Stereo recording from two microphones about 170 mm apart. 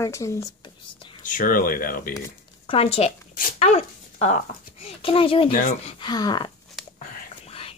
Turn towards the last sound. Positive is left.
turn(degrees=35)  # may be behind; listen again after turning